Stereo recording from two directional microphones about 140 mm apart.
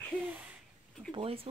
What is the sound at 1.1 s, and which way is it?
Speech, 40° right (ahead or behind).